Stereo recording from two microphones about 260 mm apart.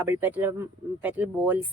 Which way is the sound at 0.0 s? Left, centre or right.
Centre.